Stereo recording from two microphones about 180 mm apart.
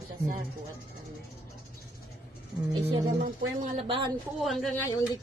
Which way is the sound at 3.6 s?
30° right (ahead or behind).